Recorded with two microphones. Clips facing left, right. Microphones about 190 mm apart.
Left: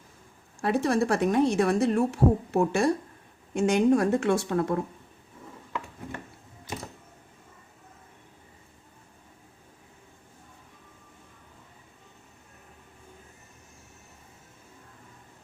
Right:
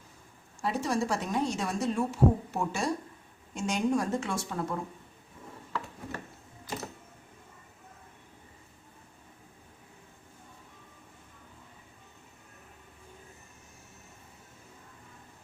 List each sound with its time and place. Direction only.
0.6 s a woman's voice: 60° left (ahead or behind)